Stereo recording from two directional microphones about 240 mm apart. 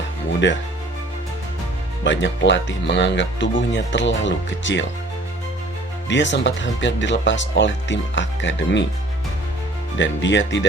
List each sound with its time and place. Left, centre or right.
0.4 s speech: left
2.0 s speech: left
6.1 s speech: left
10.0 s speech: left